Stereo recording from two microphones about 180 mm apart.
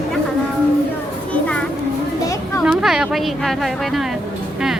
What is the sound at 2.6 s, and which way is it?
A woman's voice, 5° right (ahead or behind).